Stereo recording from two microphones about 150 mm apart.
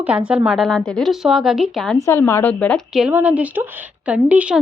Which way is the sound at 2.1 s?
15° left (ahead or behind).